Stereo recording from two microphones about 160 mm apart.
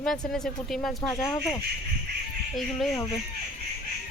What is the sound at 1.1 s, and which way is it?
Speech, 20° left (ahead or behind).